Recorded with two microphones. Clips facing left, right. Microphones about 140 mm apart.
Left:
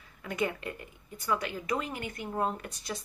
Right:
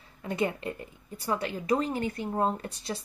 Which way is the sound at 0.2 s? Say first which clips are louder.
Right 3 dB; 30° right (ahead or behind).